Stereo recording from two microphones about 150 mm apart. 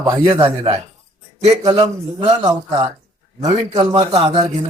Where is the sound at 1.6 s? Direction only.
30° right (ahead or behind).